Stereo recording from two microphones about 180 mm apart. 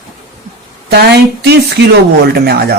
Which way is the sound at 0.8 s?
65° right (ahead or behind).